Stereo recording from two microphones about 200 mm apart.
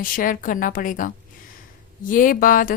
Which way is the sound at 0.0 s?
45° left (ahead or behind).